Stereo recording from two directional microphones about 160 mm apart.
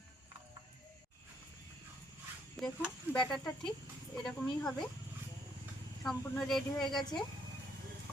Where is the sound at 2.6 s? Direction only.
Centre (ahead or behind).